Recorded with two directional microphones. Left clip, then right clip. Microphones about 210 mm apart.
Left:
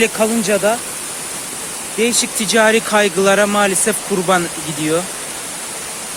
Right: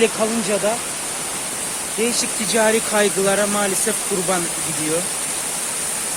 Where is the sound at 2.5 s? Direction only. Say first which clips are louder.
Left 5 dB; 35° left (ahead or behind).